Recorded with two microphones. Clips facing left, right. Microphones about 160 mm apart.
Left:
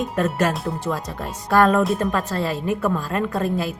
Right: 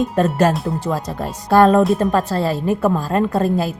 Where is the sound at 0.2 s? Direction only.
30° right (ahead or behind).